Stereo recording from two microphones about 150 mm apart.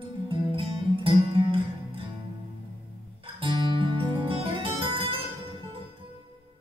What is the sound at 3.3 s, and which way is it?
Music, 35° right (ahead or behind).